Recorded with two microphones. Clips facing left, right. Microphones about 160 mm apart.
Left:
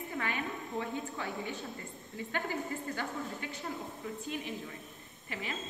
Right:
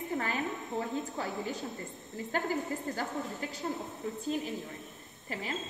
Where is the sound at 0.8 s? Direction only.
35° right (ahead or behind).